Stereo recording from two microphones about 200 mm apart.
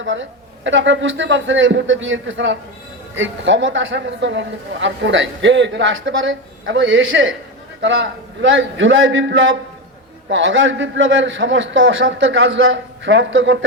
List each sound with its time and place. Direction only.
0.0 s a woman's voice: 70° right (ahead or behind)